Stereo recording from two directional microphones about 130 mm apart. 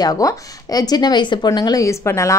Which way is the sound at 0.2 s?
25° left (ahead or behind).